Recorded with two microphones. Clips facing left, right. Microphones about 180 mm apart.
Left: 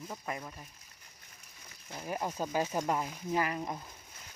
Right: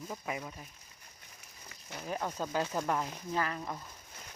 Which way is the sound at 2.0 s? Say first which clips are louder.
Left 1 dB; 10° left (ahead or behind).